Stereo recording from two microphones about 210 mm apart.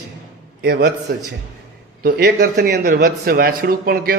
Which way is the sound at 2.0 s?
50° right (ahead or behind).